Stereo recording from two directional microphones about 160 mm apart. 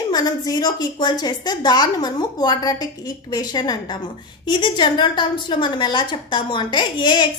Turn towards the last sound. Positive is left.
turn(degrees=30)  # may be behind; listen again after turning